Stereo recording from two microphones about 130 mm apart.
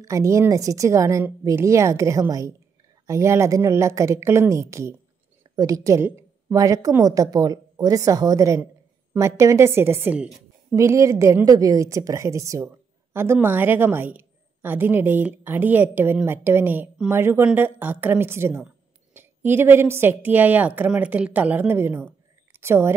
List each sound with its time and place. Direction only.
0.0 s a woman's voice: 25° right (ahead or behind)
10.2 s a sound: 5° right (ahead or behind)
10.8 s a woman's voice: 25° right (ahead or behind)